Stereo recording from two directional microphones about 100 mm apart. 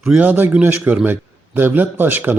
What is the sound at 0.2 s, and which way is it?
A man's voice, 15° right (ahead or behind).